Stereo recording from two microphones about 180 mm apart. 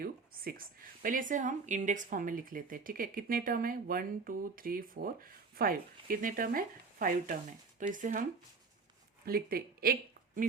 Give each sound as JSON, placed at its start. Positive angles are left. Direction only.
{"t": 0.0, "sound": "speech", "side_deg": -55}
{"t": 9.2, "sound": "speech", "side_deg": -55}